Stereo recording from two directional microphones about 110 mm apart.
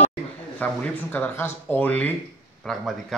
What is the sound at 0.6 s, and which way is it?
Speech, 15° left (ahead or behind).